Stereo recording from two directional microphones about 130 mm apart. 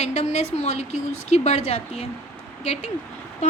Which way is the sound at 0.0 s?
60° left (ahead or behind).